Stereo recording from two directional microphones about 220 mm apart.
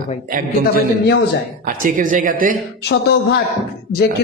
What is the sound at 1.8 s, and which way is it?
Speech, 35° right (ahead or behind).